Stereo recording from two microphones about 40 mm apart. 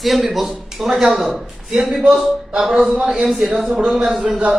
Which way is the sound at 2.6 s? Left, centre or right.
Centre.